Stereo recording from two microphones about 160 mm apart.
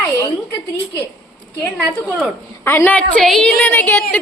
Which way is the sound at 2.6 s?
15° left (ahead or behind).